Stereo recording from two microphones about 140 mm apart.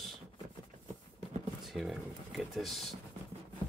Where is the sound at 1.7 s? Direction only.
Centre (ahead or behind).